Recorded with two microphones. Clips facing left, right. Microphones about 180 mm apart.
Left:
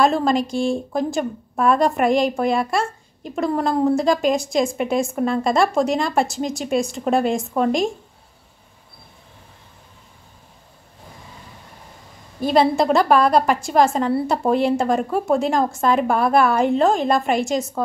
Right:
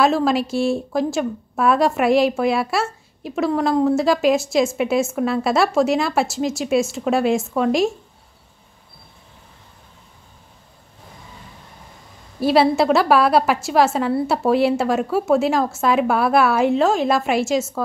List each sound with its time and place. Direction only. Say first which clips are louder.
0.0 s a woman's voice: even; 5° right (ahead or behind)
12.4 s a woman's voice: right 1 dB; 5° right (ahead or behind)